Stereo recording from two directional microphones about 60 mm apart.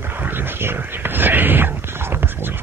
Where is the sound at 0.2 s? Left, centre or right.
Right.